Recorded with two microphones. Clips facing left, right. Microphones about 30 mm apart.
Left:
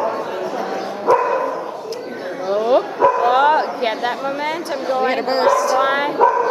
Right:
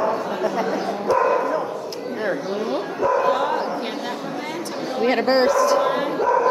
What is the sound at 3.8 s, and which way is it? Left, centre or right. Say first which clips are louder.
Chatter: left 7 dB; left.